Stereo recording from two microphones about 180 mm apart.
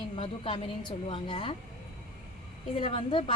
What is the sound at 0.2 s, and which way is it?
A woman's voice, 30° left (ahead or behind).